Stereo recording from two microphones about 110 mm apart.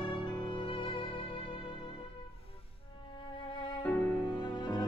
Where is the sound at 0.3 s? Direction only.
45° left (ahead or behind).